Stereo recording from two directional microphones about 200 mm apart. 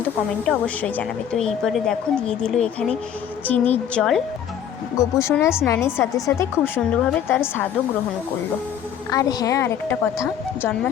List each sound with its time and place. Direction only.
0.4 s a woman's voice: 5° left (ahead or behind)
4.9 s a woman's voice: 15° left (ahead or behind)
9.0 s a woman's voice: 15° left (ahead or behind)